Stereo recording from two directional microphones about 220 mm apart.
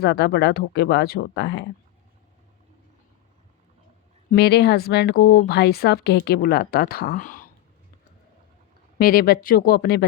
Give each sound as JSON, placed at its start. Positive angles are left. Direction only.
{"t": 0.0, "sound": "speech", "side_deg": 45}
{"t": 4.3, "sound": "speech", "side_deg": 45}
{"t": 9.0, "sound": "speech", "side_deg": 40}